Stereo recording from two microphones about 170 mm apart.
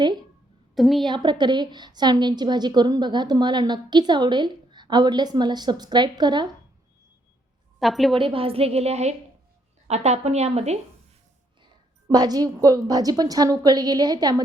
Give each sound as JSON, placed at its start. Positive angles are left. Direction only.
{"t": 0.8, "sound": "a woman's voice", "side_deg": 0}
{"t": 1.0, "sound": "a woman's voice", "side_deg": -25}
{"t": 7.8, "sound": "a woman's voice", "side_deg": 0}
{"t": 8.1, "sound": "a woman's voice", "side_deg": -30}
{"t": 12.0, "sound": "a woman's voice", "side_deg": -25}